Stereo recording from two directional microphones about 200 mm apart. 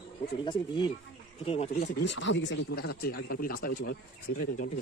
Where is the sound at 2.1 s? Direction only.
65° left (ahead or behind); by 3.9 s 45° left (ahead or behind).